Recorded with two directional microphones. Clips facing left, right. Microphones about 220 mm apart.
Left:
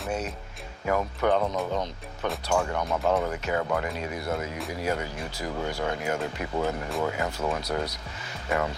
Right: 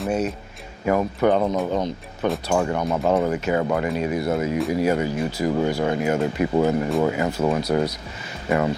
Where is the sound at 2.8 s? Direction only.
30° right (ahead or behind).